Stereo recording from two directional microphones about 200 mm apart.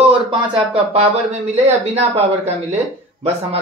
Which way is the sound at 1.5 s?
30° right (ahead or behind).